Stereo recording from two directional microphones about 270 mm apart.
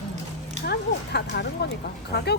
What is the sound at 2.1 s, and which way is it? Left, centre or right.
Speech, left.